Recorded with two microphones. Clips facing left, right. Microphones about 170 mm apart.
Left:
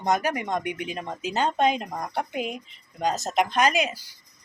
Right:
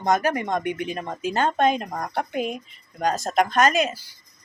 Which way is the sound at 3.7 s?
15° left (ahead or behind).